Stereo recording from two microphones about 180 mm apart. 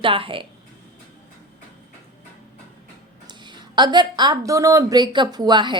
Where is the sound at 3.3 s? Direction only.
25° right (ahead or behind).